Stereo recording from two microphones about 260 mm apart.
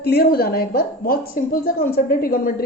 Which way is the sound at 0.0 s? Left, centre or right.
Left.